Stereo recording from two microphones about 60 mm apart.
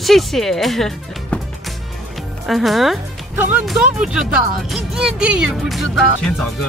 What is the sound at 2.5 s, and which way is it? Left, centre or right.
Speech, centre.